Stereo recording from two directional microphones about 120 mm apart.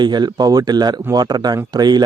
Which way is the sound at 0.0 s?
35° right (ahead or behind).